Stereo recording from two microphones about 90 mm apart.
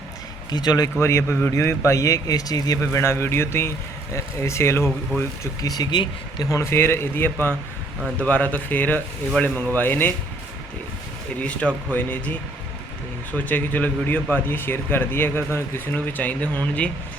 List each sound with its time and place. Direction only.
0.5 s speech: 50° left (ahead or behind)
0.9 s speech: 30° left (ahead or behind)
5.4 s speech: 45° left (ahead or behind)
6.4 s speech: 35° left (ahead or behind)
11.3 s speech: 15° left (ahead or behind)